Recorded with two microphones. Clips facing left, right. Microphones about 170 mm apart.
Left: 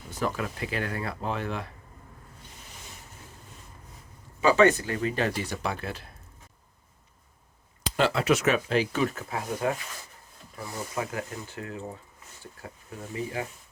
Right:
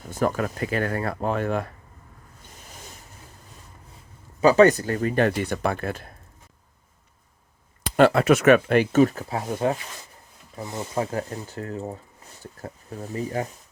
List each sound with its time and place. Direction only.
0.0 s speech: 50° right (ahead or behind)
4.4 s speech: 40° right (ahead or behind)
7.9 s speech: 55° right (ahead or behind)
9.0 s speech: 35° right (ahead or behind)
10.9 s speech: 35° right (ahead or behind)